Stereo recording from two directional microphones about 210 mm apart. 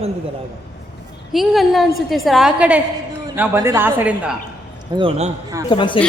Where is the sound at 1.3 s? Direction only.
Centre (ahead or behind).